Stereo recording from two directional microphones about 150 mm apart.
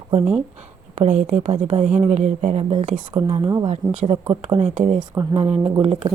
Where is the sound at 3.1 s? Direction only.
30° right (ahead or behind).